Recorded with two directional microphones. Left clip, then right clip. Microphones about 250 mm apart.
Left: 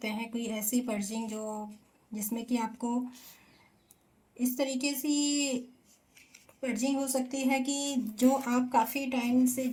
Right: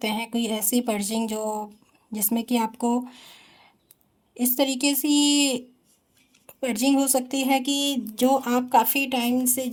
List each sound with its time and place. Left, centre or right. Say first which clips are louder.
0.0 s speech: right 9 dB; right
4.4 s speech: right 8 dB; right